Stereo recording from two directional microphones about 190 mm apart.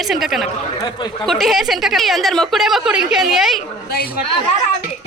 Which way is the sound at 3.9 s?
50° left (ahead or behind).